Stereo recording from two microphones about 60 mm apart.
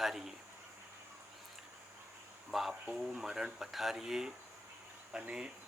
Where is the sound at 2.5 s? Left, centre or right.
Centre.